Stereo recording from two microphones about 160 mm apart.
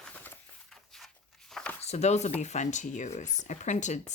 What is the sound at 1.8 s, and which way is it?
Speech, 45° left (ahead or behind).